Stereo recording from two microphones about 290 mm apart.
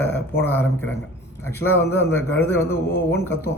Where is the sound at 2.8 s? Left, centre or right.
Left.